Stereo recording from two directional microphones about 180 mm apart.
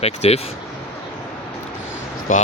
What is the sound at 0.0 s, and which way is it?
Speech, 35° left (ahead or behind).